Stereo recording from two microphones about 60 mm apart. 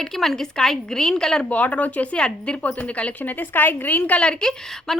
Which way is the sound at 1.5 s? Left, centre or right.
Left.